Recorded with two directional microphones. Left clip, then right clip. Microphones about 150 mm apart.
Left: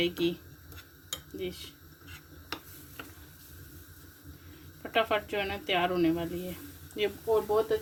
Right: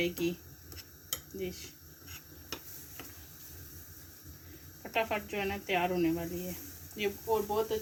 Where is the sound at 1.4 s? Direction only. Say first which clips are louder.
Left 4 dB; 75° left (ahead or behind).